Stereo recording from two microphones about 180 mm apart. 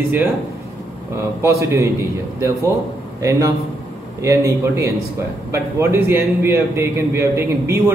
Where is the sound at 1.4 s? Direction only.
15° right (ahead or behind).